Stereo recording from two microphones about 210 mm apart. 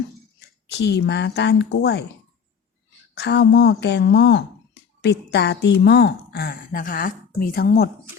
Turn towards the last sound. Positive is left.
turn(degrees=50)  # may be behind; listen again after turning